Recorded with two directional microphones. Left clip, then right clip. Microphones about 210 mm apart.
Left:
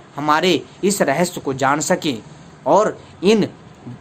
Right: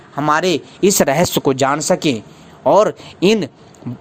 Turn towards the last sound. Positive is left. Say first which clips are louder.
# right 1 dB
turn(degrees=-35)  # may be behind; listen again after turning